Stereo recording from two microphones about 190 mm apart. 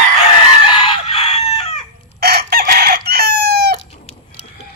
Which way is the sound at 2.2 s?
55° right (ahead or behind).